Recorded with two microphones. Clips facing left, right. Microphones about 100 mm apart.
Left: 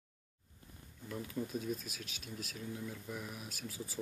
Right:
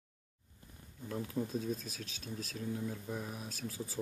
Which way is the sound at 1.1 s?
25° right (ahead or behind).